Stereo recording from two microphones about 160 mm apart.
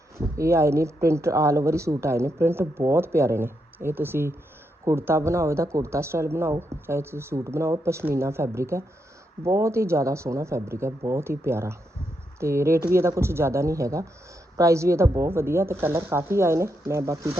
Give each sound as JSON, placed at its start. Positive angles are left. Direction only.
{"t": 0.3, "sound": "speech", "side_deg": -15}